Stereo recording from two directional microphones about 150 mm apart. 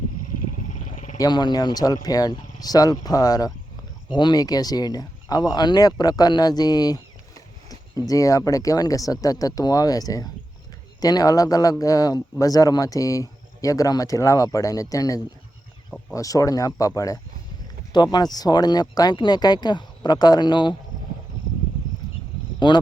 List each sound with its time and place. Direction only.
0.9 s roaring cats: 50° left (ahead or behind)
1.2 s speech: 30° left (ahead or behind)
22.6 s speech: 30° left (ahead or behind)